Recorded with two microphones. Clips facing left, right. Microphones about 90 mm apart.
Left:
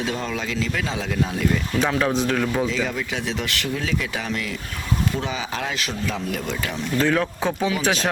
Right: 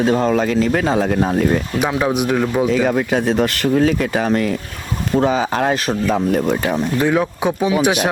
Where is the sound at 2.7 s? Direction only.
50° right (ahead or behind).